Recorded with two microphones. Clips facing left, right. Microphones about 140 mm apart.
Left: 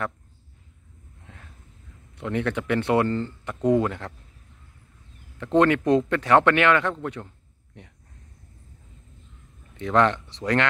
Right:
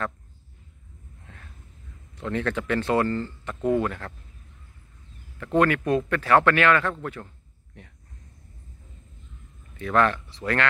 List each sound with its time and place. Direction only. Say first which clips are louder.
2.1 s speech: left 1 dB; 15° left (ahead or behind)
5.4 s speech: left 2 dB; 25° left (ahead or behind)
9.8 s speech: left 1 dB; 20° left (ahead or behind)